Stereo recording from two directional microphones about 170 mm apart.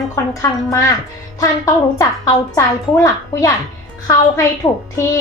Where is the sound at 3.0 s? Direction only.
20° left (ahead or behind).